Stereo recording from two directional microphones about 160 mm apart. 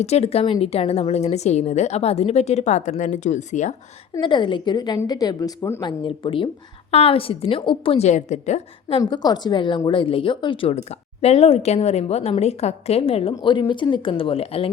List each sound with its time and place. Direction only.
0.0 s a woman's voice: 40° left (ahead or behind)
4.1 s a woman's voice: 30° left (ahead or behind)
5.8 s a woman's voice: 30° left (ahead or behind)
9.0 s a woman's voice: 25° left (ahead or behind)